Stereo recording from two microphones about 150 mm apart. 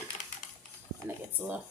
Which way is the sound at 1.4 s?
10° right (ahead or behind).